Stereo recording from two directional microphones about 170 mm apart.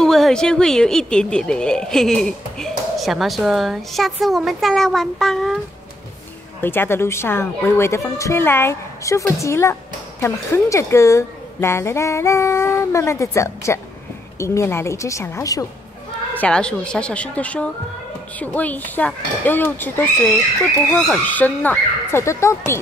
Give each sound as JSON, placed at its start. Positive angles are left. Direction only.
{"t": 0.0, "sound": "speech", "side_deg": 0}
{"t": 6.6, "sound": "a woman's voice", "side_deg": 10}
{"t": 16.3, "sound": "a woman's voice", "side_deg": 5}